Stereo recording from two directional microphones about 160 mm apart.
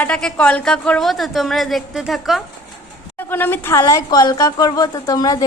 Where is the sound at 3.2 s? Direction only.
10° left (ahead or behind).